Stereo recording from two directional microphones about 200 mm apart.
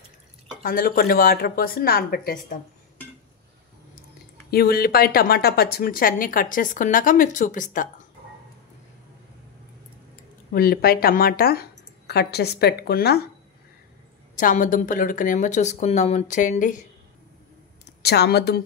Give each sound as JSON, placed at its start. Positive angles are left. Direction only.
{"t": 0.6, "sound": "speech", "side_deg": 45}
{"t": 4.5, "sound": "speech", "side_deg": 50}
{"t": 10.5, "sound": "speech", "side_deg": 50}
{"t": 14.3, "sound": "speech", "side_deg": 40}
{"t": 18.0, "sound": "a woman's voice", "side_deg": 55}